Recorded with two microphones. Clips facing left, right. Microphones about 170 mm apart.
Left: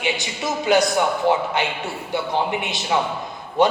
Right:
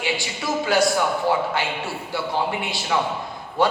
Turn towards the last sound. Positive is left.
turn(degrees=20)  # may be behind; listen again after turning